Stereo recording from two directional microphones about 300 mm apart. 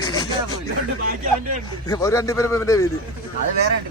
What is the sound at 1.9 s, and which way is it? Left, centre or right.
Speech, centre.